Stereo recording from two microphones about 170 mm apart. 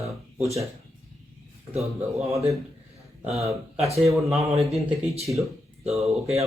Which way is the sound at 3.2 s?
Centre (ahead or behind).